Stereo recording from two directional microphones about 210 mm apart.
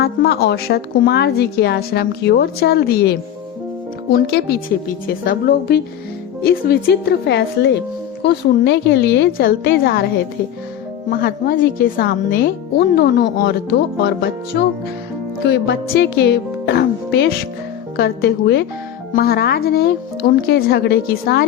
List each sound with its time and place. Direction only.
0.0 s a woman's voice: 50° left (ahead or behind)
4.7 s a woman's voice: 40° left (ahead or behind)
11.1 s a woman's voice: 45° left (ahead or behind)
15.4 s a woman's voice: 55° left (ahead or behind)